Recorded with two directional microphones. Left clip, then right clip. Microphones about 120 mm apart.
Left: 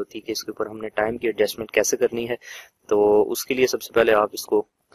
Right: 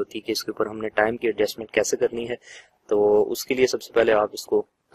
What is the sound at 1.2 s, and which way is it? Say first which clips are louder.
Speech: left 1 dB; 30° left (ahead or behind).